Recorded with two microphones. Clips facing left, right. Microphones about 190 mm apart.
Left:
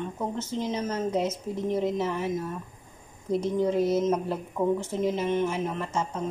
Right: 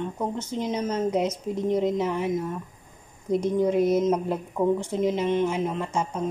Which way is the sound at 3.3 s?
15° right (ahead or behind).